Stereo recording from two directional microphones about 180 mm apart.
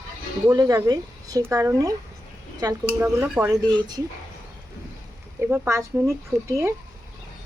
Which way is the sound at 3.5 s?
20° right (ahead or behind).